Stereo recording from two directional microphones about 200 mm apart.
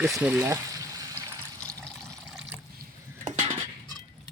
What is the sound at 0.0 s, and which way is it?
Water, 5° right (ahead or behind).